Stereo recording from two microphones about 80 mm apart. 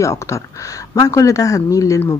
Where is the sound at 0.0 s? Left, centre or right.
Left.